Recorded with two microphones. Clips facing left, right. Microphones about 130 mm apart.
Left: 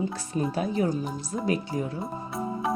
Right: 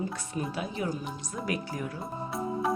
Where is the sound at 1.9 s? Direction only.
Centre (ahead or behind).